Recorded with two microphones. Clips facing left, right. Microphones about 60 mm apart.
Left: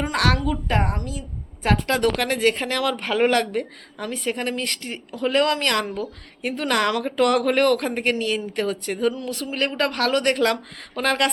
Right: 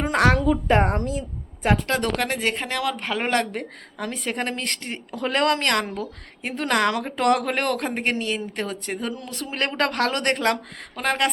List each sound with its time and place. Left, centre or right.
0.0 s speech: right
1.6 s a woman's voice: centre
2.0 s speech: right
3.9 s speech: right
5.1 s speech: right; by 9.1 s centre
9.1 s speech: right
9.5 s speech: right
10.3 s speech: right